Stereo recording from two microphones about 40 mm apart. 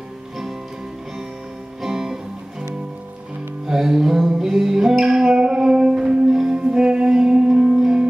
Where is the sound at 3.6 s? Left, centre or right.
Centre.